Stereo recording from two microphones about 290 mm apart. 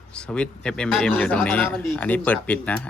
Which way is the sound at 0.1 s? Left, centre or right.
Centre.